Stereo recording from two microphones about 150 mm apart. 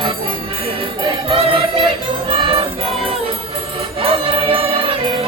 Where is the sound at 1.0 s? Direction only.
35° right (ahead or behind).